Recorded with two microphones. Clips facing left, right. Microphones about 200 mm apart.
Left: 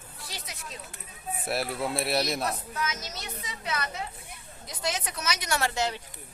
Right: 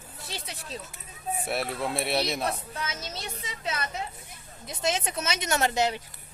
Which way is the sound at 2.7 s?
30° right (ahead or behind).